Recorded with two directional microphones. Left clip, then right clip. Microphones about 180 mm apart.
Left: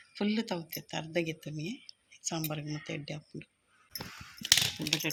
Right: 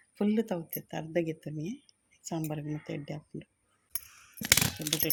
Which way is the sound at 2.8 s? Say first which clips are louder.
Even; 35° right (ahead or behind).